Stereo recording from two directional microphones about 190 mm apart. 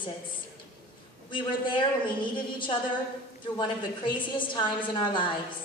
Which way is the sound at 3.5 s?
25° left (ahead or behind).